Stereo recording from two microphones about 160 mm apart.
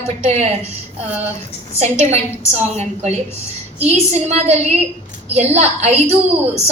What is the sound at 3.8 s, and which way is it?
A woman's voice, 40° right (ahead or behind).